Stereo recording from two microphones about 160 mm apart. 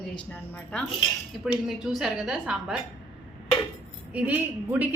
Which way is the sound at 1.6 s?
5° right (ahead or behind).